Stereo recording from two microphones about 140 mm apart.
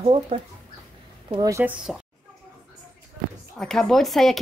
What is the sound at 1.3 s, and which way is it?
Speech, 25° right (ahead or behind).